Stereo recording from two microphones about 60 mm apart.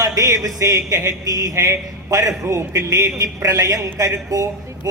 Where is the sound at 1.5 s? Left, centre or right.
Right.